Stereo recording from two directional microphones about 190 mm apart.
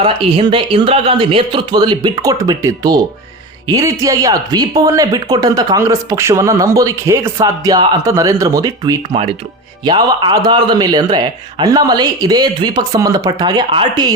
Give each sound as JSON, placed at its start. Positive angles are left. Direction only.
{"t": 0.0, "sound": "speech", "side_deg": -30}